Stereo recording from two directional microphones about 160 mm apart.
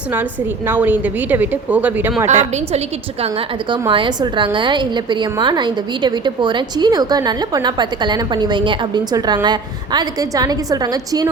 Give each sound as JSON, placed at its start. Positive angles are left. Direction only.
{"t": 0.7, "sound": "speech", "side_deg": -10}
{"t": 3.7, "sound": "a woman's voice", "side_deg": -30}